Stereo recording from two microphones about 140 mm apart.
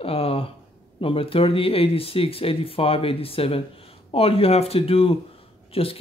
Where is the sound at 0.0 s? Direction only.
45° left (ahead or behind).